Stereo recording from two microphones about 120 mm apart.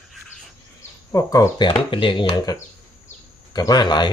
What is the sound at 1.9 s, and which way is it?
Speech, 40° left (ahead or behind).